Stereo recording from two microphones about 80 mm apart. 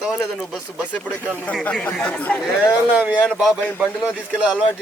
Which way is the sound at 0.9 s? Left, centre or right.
Centre.